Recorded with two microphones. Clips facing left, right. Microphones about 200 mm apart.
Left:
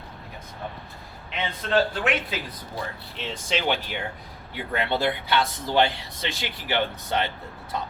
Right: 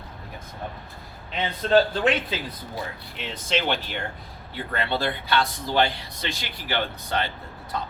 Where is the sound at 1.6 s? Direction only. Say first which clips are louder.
Right 4 dB; 30° right (ahead or behind).